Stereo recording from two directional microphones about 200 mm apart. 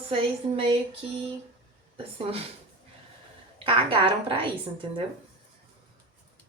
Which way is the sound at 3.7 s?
25° right (ahead or behind).